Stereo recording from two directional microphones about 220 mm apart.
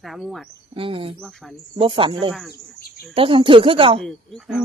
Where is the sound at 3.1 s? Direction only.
25° right (ahead or behind).